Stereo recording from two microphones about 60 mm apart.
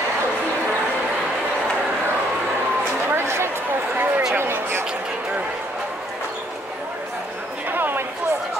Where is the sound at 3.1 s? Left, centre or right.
Right.